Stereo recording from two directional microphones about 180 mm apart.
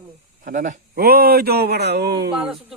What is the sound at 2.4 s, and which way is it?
Speech, centre (ahead or behind).